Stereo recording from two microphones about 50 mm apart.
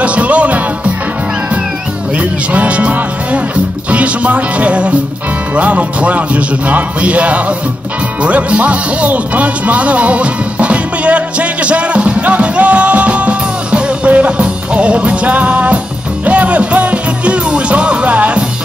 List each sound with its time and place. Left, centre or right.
0.0 s music: right
2.1 s speech: right
16.3 s music: right